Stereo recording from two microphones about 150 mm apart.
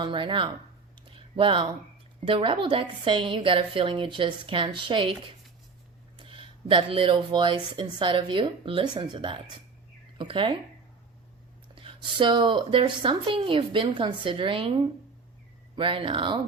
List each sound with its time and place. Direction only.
0.0 s speech: 35° right (ahead or behind)
1.0 s a sound: 35° right (ahead or behind)
2.2 s speech: 35° right (ahead or behind)
11.7 s speech: 35° right (ahead or behind)